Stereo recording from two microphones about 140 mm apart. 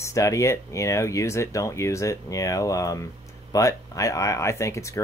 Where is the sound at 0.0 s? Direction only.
20° left (ahead or behind).